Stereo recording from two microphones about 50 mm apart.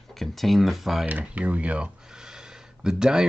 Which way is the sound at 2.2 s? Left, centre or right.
Centre.